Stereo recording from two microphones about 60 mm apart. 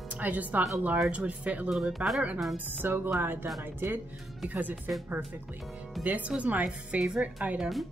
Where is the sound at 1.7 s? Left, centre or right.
Centre.